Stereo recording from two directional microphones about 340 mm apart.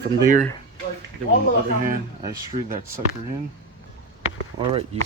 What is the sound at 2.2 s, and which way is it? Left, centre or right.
Speech, centre.